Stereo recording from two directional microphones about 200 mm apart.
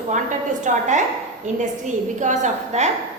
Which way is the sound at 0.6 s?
40° right (ahead or behind).